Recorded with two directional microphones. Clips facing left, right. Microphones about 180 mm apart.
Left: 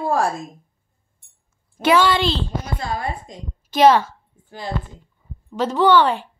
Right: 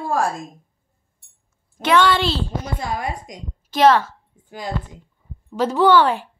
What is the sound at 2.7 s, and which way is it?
Speech, 20° right (ahead or behind).